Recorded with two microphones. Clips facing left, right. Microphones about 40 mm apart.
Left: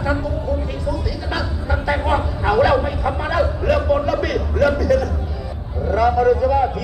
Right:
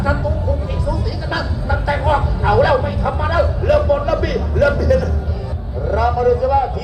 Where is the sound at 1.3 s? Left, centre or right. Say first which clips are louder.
Right 3 dB; centre.